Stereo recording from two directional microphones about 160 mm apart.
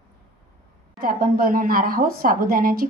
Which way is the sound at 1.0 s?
65° right (ahead or behind).